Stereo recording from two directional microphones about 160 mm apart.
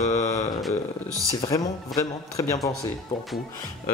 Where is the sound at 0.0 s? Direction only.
45° left (ahead or behind).